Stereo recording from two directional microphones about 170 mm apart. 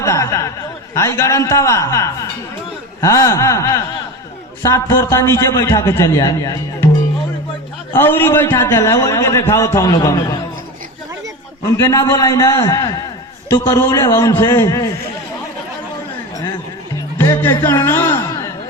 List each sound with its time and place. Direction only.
0.0 s a man's voice: 15° left (ahead or behind)
7.9 s a man's voice: 10° left (ahead or behind)
11.6 s a man's voice: 20° left (ahead or behind)
17.2 s music: 15° left (ahead or behind)